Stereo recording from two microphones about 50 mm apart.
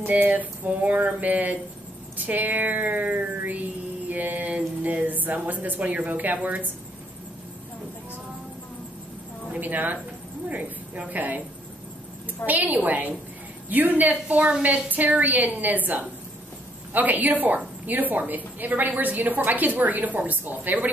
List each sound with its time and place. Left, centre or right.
0.0 s a woman's voice: right
9.5 s a woman's voice: right
12.4 s a woman's voice: left
12.7 s a woman's voice: right